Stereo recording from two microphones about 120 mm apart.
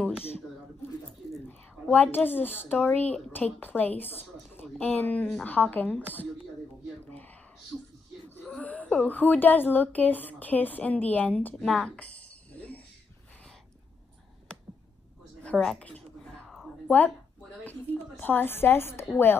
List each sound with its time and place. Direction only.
1.5 s a woman's voice: 15° left (ahead or behind)
7.1 s a sound: 15° left (ahead or behind)
8.5 s a woman's voice: 10° left (ahead or behind)
15.4 s a woman's voice: 5° left (ahead or behind)
16.4 s a sound: centre (ahead or behind)
18.2 s a woman's voice: 15° left (ahead or behind)